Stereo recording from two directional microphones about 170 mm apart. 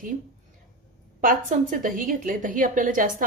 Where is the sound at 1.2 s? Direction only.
50° right (ahead or behind).